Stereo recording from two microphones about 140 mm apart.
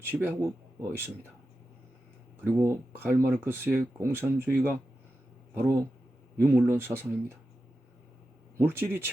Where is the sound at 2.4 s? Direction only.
20° right (ahead or behind).